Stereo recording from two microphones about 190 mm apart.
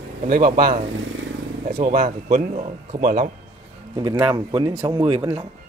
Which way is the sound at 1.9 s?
40° right (ahead or behind).